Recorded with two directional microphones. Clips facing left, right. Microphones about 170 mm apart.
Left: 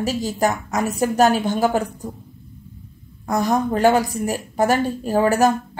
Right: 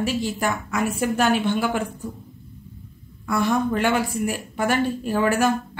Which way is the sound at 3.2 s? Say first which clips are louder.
Left 2 dB; 40° left (ahead or behind).